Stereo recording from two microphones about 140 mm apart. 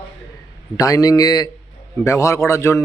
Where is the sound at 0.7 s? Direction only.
25° left (ahead or behind).